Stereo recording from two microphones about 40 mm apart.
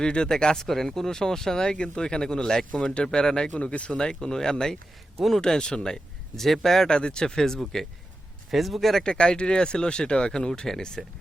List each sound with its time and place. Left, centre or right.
0.0 s speech: left
3.6 s speech: left
3.9 s speech: centre
6.8 s speech: left
8.4 s speech: centre
9.0 s speech: left